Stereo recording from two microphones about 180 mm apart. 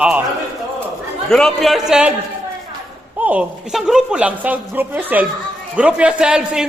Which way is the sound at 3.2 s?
10° right (ahead or behind).